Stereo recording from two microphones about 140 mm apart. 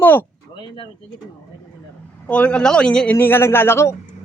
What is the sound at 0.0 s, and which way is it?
Speech, 15° left (ahead or behind).